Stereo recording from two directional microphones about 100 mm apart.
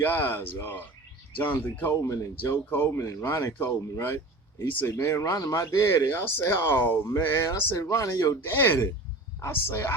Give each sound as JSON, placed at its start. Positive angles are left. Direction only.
{"t": 0.0, "sound": "speech", "side_deg": 20}
{"t": 2.0, "sound": "speech", "side_deg": 30}
{"t": 2.4, "sound": "speech", "side_deg": 20}